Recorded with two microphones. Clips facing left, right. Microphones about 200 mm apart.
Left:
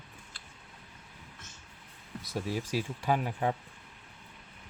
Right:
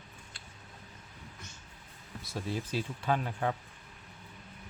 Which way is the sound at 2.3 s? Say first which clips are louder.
Left 2 dB; 10° left (ahead or behind).